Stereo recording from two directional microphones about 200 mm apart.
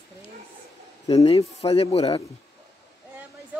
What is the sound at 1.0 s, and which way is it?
Speech, 30° left (ahead or behind).